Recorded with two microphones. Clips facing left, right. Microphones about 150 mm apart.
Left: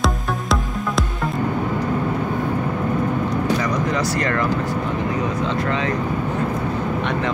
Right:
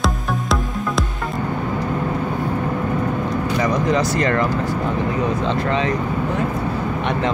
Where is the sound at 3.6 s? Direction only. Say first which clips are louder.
Right 3 dB; 20° right (ahead or behind).